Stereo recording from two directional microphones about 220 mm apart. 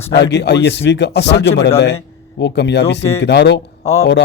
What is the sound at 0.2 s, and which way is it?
Speech, 50° left (ahead or behind).